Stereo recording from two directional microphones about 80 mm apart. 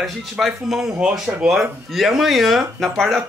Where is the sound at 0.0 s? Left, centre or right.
Centre.